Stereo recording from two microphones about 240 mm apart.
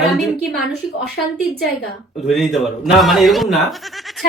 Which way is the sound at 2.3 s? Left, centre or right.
Centre.